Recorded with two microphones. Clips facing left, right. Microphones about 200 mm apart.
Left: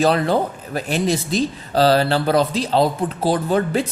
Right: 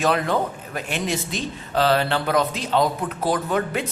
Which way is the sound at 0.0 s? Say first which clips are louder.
Left 4 dB; 35° left (ahead or behind).